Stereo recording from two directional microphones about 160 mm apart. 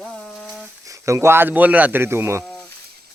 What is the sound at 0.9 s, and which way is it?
Speech, 20° right (ahead or behind).